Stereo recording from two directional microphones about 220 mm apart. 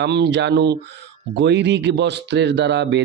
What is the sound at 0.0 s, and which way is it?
Speech, 50° right (ahead or behind).